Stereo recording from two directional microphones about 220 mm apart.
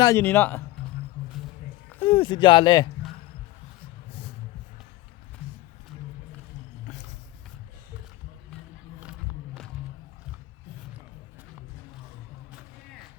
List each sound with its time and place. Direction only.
0.0 s speech: 10° left (ahead or behind)
2.0 s speech: 25° left (ahead or behind)